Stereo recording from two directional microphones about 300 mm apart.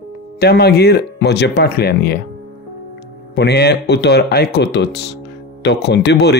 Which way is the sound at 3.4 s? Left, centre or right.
Left.